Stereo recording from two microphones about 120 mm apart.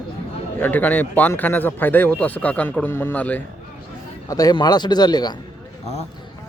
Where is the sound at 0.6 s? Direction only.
15° left (ahead or behind).